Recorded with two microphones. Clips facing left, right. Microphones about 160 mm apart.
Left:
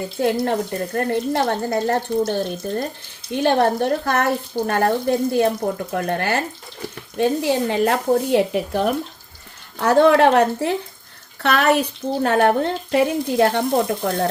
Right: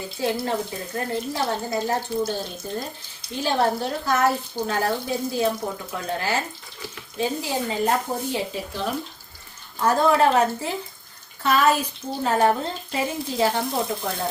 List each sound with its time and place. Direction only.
0.0 s speech: 60° left (ahead or behind)
9.8 s speech: 75° left (ahead or behind)